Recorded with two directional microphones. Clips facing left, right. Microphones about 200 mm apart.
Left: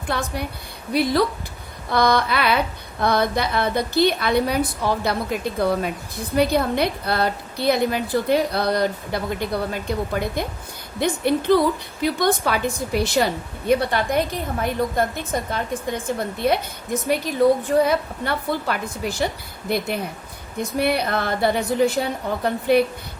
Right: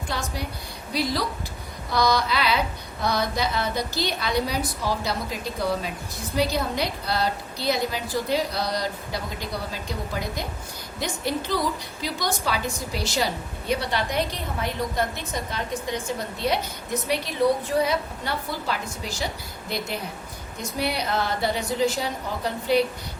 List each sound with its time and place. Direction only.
0.1 s a woman's voice: 60° left (ahead or behind)
20.6 s a woman's voice: 55° left (ahead or behind)